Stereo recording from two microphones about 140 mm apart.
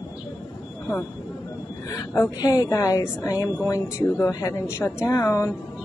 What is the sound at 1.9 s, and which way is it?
A woman's voice, 20° left (ahead or behind).